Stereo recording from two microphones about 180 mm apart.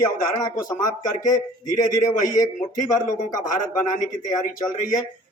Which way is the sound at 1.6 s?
45° left (ahead or behind).